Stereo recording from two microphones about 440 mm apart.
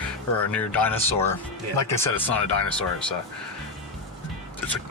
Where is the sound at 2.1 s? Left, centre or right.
Centre.